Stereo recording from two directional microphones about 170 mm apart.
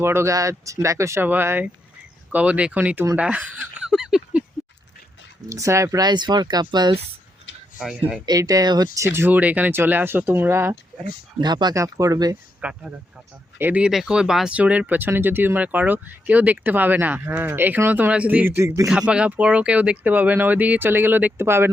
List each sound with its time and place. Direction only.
0.0 s speech: 15° right (ahead or behind)
5.5 s speech: 20° right (ahead or behind)
7.8 s speech: 5° right (ahead or behind)
8.3 s speech: 20° right (ahead or behind)
9.1 s speech: 10° right (ahead or behind)
12.6 s speech: 10° right (ahead or behind)